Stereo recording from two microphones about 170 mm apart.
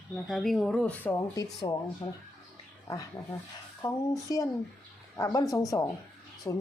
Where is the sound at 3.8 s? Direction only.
20° left (ahead or behind).